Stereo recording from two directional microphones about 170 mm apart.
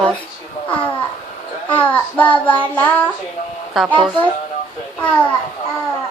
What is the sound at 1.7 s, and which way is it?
A child's voice, 10° left (ahead or behind).